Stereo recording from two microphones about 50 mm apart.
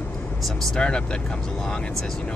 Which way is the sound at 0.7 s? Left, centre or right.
Centre.